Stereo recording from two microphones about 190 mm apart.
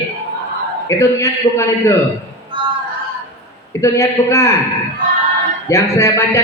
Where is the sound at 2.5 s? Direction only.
25° right (ahead or behind).